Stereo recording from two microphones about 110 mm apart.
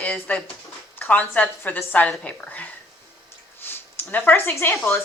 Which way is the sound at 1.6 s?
15° left (ahead or behind).